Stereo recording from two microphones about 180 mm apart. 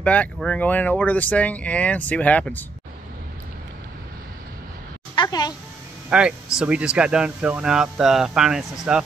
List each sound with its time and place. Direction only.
0.0 s speech: 5° left (ahead or behind)
5.1 s speech: 25° left (ahead or behind)
6.0 s speech: 5° right (ahead or behind)